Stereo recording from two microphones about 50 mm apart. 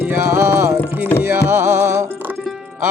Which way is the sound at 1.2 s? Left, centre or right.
Right.